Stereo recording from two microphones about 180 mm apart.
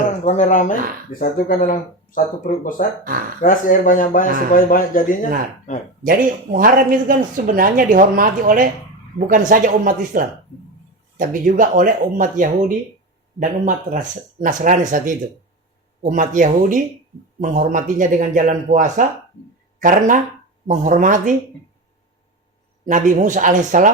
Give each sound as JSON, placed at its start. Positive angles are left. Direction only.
{"t": 0.3, "sound": "speech", "side_deg": 45}
{"t": 6.0, "sound": "speech", "side_deg": -50}
{"t": 22.9, "sound": "speech", "side_deg": -45}